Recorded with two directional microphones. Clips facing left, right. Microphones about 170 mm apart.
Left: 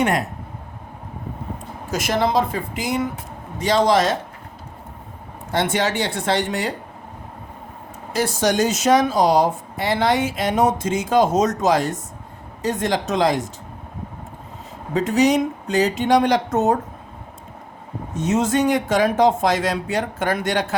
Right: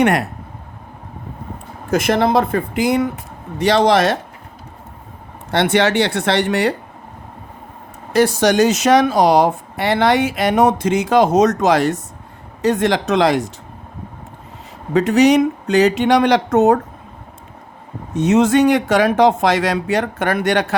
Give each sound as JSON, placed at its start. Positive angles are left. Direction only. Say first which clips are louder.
{"t": 0.0, "sound": "speech", "louder": "right 5 dB", "side_deg": -70}
{"t": 1.9, "sound": "speech", "louder": "right 5 dB", "side_deg": -60}
{"t": 5.5, "sound": "speech", "louder": "right 5 dB", "side_deg": -70}
{"t": 8.1, "sound": "speech", "louder": "right 6 dB", "side_deg": -65}
{"t": 14.9, "sound": "speech", "louder": "right 5 dB", "side_deg": -70}
{"t": 18.2, "sound": "speech", "louder": "right 6 dB", "side_deg": -70}